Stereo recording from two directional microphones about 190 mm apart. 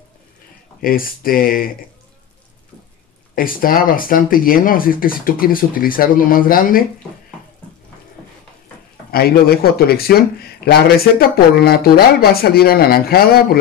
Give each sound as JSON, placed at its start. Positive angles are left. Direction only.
{"t": 0.7, "sound": "speech", "side_deg": 50}
{"t": 3.3, "sound": "speech", "side_deg": 50}
{"t": 9.1, "sound": "speech", "side_deg": 55}